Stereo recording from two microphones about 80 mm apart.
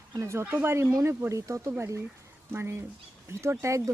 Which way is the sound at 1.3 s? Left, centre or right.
Right.